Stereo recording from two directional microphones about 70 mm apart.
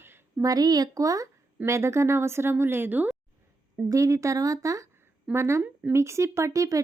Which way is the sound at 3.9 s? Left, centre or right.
Right.